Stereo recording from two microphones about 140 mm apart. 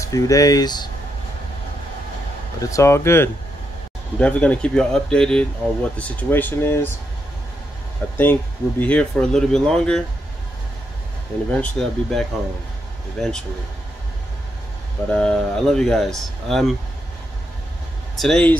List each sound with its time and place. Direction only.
0.0 s speech: 25° left (ahead or behind)
2.6 s speech: 20° left (ahead or behind)
8.2 s speech: 15° left (ahead or behind)
11.5 s speech: 5° left (ahead or behind)
15.0 s speech: 5° left (ahead or behind)
18.2 s speech: 5° left (ahead or behind)